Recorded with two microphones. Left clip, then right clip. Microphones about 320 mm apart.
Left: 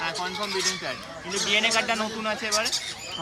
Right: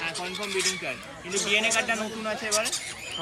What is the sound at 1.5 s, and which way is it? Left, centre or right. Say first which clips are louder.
Speech: left 1 dB; left.